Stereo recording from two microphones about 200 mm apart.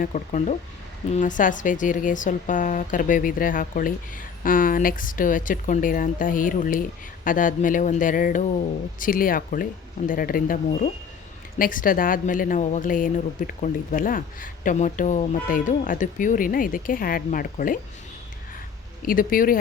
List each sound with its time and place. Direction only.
0.0 s speech: 35° left (ahead or behind)
19.0 s speech: 45° left (ahead or behind)